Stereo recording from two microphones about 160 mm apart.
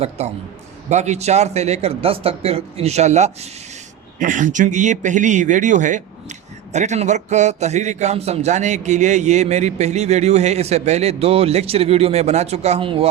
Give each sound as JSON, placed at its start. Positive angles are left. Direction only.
{"t": 0.2, "sound": "a man's voice", "side_deg": -45}